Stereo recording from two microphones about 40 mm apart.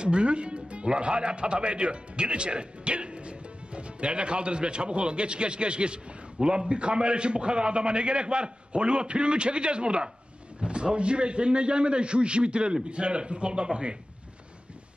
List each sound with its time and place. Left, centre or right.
0.0 s a man's voice: right